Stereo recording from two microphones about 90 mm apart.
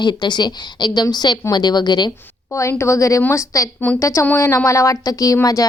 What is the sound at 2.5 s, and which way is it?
A woman's voice, 30° left (ahead or behind).